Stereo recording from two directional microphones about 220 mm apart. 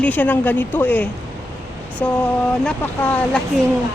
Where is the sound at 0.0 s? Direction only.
10° left (ahead or behind).